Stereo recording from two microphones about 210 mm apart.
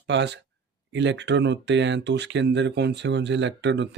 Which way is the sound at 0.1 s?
55° right (ahead or behind).